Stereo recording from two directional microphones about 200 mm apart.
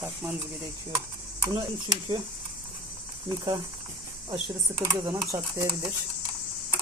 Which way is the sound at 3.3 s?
20° right (ahead or behind).